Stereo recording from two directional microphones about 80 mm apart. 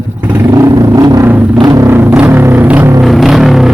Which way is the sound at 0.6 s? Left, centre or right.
Right.